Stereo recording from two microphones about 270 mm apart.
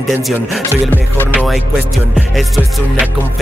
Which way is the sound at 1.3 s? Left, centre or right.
Centre.